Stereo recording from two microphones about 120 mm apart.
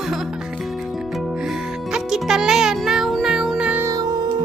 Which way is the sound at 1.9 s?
5° right (ahead or behind).